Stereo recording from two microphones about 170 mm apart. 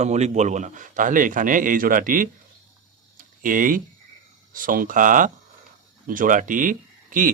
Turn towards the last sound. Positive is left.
turn(degrees=-50)  # may be behind; listen again after turning